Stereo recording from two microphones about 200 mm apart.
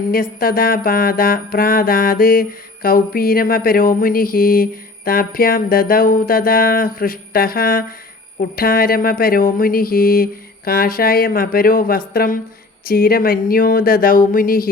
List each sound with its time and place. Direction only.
0.1 s music: 45° left (ahead or behind)